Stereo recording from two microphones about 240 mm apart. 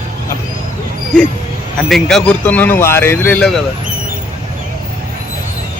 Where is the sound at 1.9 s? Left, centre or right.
Centre.